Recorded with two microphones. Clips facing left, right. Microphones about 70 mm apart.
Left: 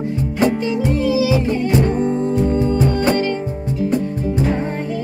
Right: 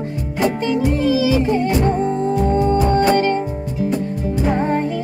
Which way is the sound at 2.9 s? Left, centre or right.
Right.